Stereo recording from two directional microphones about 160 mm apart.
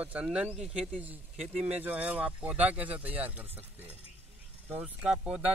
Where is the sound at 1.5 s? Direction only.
40° right (ahead or behind).